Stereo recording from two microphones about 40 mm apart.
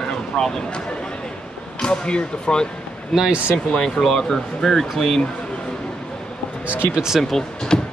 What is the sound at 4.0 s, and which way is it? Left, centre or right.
Speech, centre.